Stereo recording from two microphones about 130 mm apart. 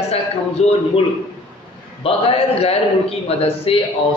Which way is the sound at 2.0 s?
50° left (ahead or behind).